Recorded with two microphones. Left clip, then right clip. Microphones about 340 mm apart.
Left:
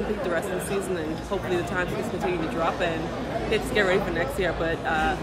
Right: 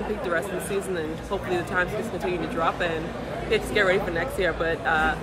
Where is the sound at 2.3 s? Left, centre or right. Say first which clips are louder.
Right 2 dB; centre.